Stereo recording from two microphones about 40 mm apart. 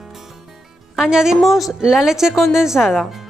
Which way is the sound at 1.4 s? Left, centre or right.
Centre.